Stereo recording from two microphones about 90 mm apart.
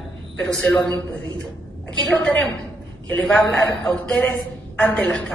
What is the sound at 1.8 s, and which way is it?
A man's voice, 15° left (ahead or behind).